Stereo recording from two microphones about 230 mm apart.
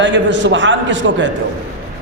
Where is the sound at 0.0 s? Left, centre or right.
Right.